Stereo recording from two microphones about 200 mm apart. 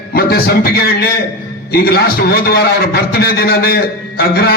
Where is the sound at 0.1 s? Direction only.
50° left (ahead or behind).